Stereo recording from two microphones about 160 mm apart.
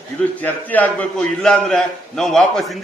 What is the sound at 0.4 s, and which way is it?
A man's voice, 10° left (ahead or behind).